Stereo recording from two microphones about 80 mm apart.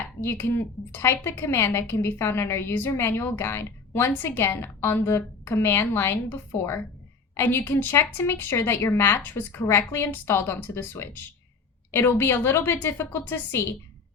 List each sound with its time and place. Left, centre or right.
0.2 s a woman's voice: left